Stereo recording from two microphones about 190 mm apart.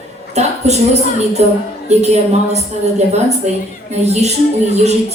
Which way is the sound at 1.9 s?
35° right (ahead or behind).